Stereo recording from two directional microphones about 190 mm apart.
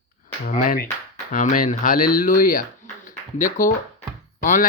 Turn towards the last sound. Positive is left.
turn(degrees=45)  # may be behind; listen again after turning